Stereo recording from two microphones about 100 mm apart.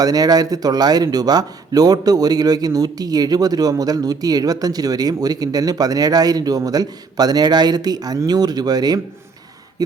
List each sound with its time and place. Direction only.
0.0 s speech: 40° right (ahead or behind)